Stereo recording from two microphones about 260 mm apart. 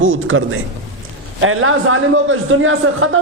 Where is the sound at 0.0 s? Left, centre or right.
Right.